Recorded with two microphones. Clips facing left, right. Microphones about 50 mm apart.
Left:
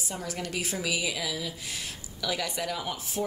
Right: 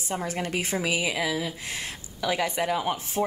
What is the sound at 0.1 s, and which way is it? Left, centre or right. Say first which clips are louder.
Speech: right 6 dB; right.